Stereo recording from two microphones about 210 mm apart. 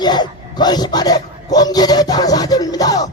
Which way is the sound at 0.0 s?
20° left (ahead or behind).